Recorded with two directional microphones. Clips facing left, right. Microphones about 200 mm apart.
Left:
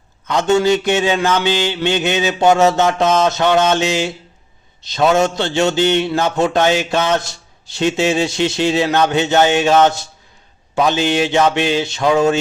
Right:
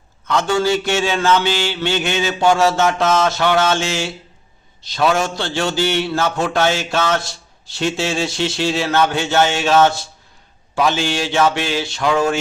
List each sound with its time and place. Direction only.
0.3 s mantra: 20° left (ahead or behind)